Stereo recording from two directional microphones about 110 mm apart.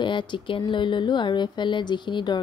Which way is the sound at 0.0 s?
45° left (ahead or behind).